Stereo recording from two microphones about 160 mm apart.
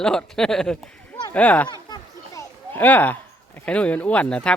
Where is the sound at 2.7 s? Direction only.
10° left (ahead or behind).